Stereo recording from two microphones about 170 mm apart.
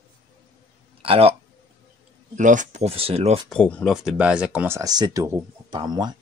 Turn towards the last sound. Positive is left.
turn(degrees=-25)  # may be behind; listen again after turning